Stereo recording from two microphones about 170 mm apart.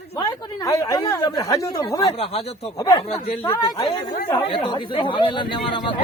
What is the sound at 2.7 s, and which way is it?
Speech, 25° left (ahead or behind).